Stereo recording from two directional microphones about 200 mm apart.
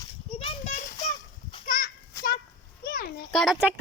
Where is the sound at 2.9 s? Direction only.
50° left (ahead or behind).